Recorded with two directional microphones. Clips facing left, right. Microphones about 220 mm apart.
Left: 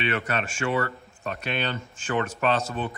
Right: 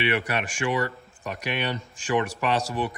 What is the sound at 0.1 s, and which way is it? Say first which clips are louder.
Speech: right 1 dB; 15° right (ahead or behind).